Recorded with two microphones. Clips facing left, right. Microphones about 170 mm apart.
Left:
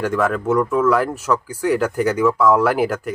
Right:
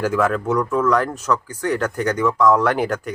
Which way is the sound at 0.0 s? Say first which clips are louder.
Even; centre (ahead or behind).